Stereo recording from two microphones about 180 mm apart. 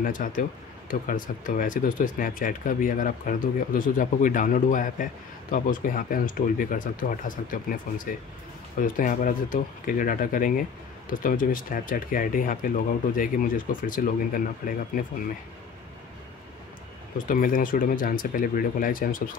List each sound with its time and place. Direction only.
0.0 s speech: 50° left (ahead or behind)
17.3 s speech: 50° left (ahead or behind)